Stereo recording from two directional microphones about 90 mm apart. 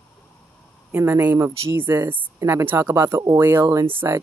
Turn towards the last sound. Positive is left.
turn(degrees=-35)  # may be behind; listen again after turning